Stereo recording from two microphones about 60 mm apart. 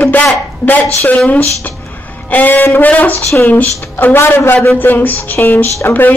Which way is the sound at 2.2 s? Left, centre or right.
Left.